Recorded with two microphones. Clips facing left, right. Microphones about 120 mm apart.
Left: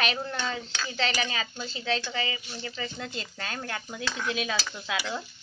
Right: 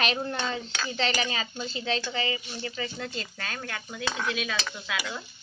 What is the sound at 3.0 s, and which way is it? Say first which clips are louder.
Speech: right 1 dB; 20° left (ahead or behind).